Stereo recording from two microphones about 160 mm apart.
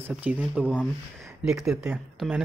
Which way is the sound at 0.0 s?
10° right (ahead or behind).